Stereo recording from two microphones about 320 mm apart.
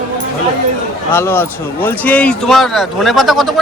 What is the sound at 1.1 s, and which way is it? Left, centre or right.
Speech, centre.